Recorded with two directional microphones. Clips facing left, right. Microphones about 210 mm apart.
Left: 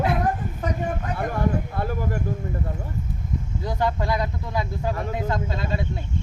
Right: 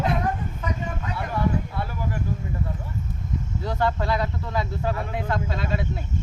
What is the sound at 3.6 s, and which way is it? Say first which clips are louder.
Speech: even; 15° left (ahead or behind).